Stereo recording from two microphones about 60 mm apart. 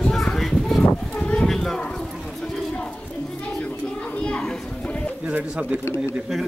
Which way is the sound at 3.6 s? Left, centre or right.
Left.